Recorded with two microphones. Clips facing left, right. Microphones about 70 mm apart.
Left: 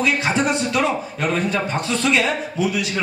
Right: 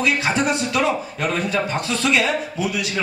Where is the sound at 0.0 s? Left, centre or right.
Centre.